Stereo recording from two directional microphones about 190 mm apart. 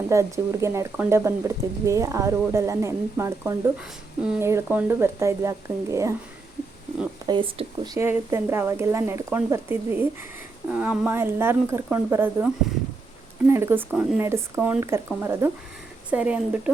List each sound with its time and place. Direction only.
0.1 s speech: 15° right (ahead or behind)
7.3 s speech: 25° right (ahead or behind)
7.9 s speech: 10° right (ahead or behind)
13.5 s speech: 10° right (ahead or behind)